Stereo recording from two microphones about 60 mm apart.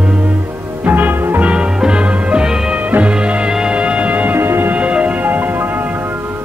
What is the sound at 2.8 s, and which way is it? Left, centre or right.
Music, right.